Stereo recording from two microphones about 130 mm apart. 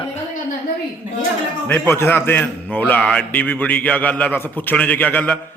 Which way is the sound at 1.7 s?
20° left (ahead or behind).